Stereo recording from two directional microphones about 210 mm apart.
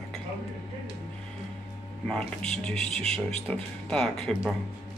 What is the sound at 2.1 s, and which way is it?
Speech, 5° left (ahead or behind).